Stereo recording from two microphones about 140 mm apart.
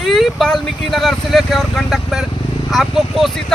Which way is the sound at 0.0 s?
Centre (ahead or behind).